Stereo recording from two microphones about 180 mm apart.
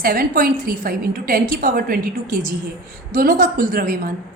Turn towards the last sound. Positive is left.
turn(degrees=-50)  # may be behind; listen again after turning